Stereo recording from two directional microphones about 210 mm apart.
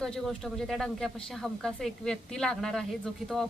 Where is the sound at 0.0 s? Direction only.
Centre (ahead or behind).